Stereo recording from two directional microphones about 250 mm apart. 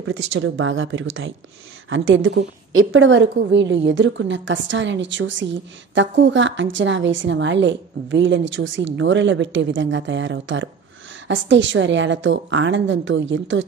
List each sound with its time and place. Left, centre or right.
0.3 s a woman's voice: right